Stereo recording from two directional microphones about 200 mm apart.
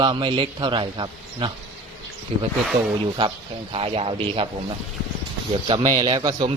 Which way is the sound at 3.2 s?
25° right (ahead or behind).